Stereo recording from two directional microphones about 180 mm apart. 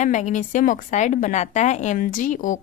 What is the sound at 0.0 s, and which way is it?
A woman's voice, 45° left (ahead or behind).